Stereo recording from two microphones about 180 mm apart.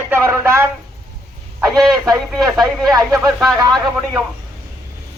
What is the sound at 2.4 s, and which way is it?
Speech, centre (ahead or behind).